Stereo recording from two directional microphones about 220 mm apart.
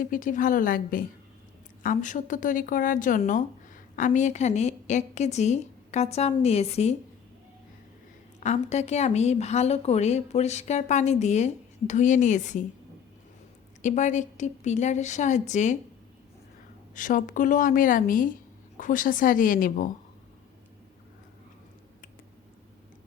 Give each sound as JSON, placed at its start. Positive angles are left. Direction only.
{"t": 0.0, "sound": "speech", "side_deg": 40}
{"t": 8.4, "sound": "speech", "side_deg": 30}
{"t": 13.8, "sound": "speech", "side_deg": 35}
{"t": 16.9, "sound": "speech", "side_deg": 35}